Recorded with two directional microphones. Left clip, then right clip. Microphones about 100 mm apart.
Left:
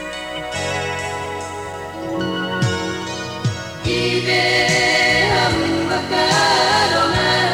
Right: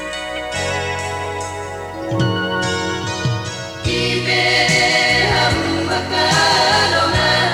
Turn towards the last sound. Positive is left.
turn(degrees=45)  # may be behind; listen again after turning